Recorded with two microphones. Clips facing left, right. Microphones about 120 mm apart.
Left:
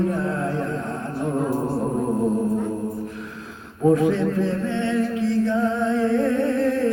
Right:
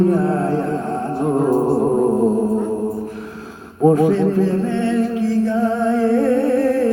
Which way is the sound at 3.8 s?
30° right (ahead or behind).